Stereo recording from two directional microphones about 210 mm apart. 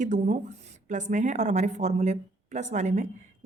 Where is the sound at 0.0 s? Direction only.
35° right (ahead or behind).